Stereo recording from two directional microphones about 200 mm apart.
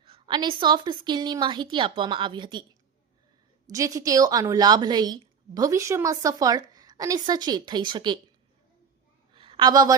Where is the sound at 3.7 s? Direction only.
15° right (ahead or behind).